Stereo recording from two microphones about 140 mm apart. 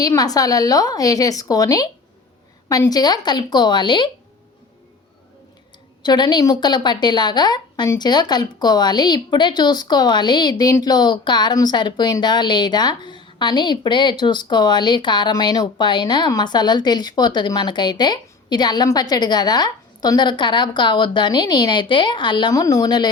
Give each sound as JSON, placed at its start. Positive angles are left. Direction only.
{"t": 0.0, "sound": "a woman's voice", "side_deg": 25}
{"t": 6.0, "sound": "a woman's voice", "side_deg": 30}